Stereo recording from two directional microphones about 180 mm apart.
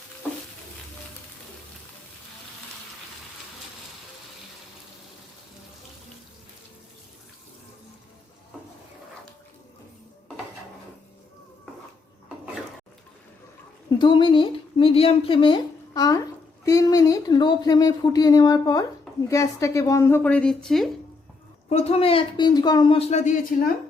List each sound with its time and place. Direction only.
14.0 s a woman's voice: 25° left (ahead or behind); by 20.9 s centre (ahead or behind)
21.7 s speech: 35° left (ahead or behind)